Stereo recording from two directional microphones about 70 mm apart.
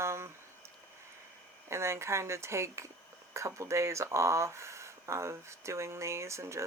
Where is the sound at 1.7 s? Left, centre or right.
Right.